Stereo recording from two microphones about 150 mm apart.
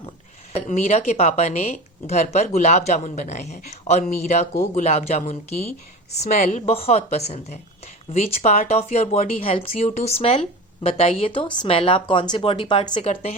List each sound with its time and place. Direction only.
0.5 s speech: 50° left (ahead or behind)